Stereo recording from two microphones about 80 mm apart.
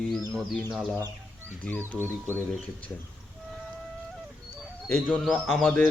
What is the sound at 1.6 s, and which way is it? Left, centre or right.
Speech, centre.